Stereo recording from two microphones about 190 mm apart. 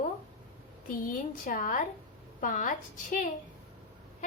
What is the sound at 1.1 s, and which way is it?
A woman's voice, 45° left (ahead or behind).